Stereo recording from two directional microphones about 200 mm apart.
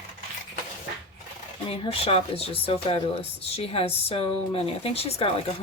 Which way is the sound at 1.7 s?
30° left (ahead or behind).